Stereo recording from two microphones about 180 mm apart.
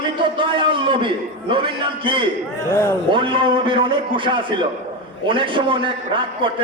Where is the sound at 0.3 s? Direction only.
25° right (ahead or behind).